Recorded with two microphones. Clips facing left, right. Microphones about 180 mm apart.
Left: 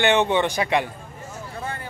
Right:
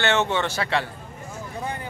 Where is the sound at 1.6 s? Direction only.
15° right (ahead or behind).